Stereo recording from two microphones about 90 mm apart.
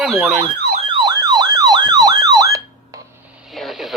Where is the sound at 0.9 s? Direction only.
50° right (ahead or behind).